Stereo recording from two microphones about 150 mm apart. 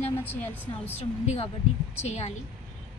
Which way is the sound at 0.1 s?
15° left (ahead or behind).